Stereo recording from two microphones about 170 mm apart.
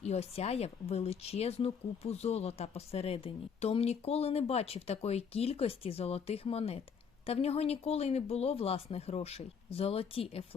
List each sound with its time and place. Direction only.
0.0 s speech: 40° left (ahead or behind)